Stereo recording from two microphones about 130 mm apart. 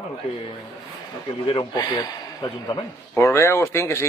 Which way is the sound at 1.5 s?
40° left (ahead or behind).